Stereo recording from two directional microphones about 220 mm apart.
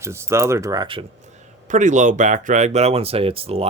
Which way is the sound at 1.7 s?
35° right (ahead or behind).